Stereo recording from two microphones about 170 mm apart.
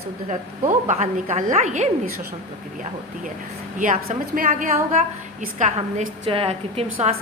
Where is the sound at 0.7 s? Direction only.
45° right (ahead or behind).